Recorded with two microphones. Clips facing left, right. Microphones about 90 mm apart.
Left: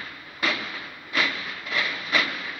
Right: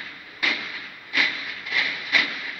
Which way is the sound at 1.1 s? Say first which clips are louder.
Even; 30° left (ahead or behind).